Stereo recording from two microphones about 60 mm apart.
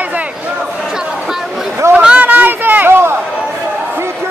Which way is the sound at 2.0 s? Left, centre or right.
Right.